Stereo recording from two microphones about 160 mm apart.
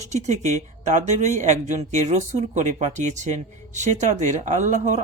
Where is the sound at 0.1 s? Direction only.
45° right (ahead or behind).